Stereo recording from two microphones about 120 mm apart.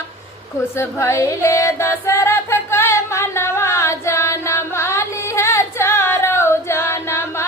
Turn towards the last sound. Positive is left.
turn(degrees=20)  # may be behind; listen again after turning